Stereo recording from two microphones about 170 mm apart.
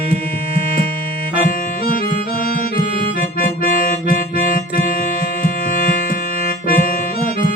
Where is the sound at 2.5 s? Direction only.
55° left (ahead or behind).